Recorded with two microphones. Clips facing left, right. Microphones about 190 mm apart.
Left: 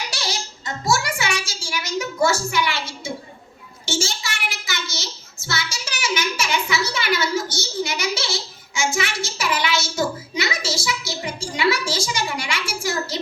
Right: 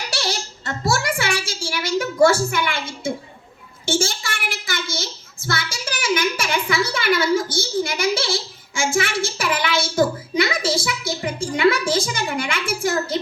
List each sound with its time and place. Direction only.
0.1 s a child's voice: 60° right (ahead or behind)
3.8 s child singing: 55° right (ahead or behind)